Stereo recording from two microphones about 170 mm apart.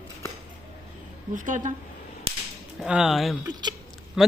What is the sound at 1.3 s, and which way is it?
Speech, 50° right (ahead or behind).